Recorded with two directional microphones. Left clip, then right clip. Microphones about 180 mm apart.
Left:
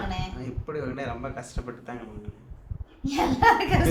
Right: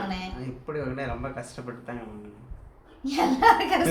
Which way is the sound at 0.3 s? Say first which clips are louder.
Even; 10° left (ahead or behind).